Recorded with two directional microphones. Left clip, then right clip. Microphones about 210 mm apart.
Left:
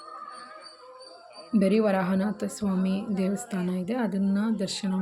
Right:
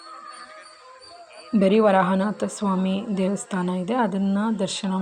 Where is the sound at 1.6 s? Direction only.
25° left (ahead or behind).